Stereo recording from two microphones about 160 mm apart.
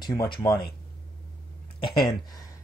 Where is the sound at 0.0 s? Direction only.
25° left (ahead or behind).